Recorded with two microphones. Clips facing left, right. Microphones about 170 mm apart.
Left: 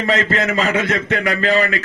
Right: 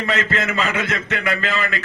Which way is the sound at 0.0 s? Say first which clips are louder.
Left 4 dB; 35° left (ahead or behind).